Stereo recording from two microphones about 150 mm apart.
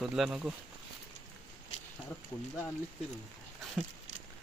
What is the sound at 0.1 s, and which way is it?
Speech, 5° right (ahead or behind).